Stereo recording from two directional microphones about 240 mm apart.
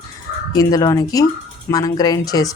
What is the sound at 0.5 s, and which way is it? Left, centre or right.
Speech, centre.